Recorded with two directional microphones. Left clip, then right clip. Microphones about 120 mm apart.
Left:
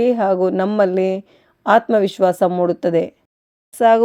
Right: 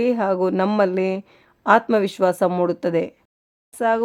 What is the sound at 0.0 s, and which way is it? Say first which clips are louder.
A woman's voice: left 4 dB; 5° left (ahead or behind).